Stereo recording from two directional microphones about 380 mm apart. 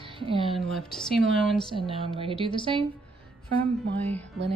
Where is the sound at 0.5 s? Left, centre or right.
Centre.